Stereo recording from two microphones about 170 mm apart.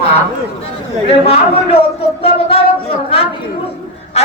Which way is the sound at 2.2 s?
35° left (ahead or behind).